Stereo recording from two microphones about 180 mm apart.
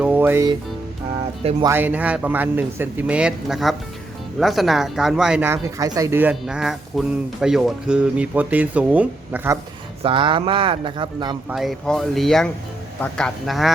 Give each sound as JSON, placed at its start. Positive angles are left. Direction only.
{"t": 0.0, "sound": "music", "side_deg": -10}
{"t": 1.6, "sound": "a man's voice", "side_deg": -10}
{"t": 6.4, "sound": "a man's voice", "side_deg": 0}
{"t": 10.0, "sound": "speech", "side_deg": -30}
{"t": 11.4, "sound": "speech", "side_deg": 0}